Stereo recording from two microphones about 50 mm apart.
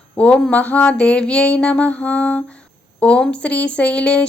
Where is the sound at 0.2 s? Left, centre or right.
Left.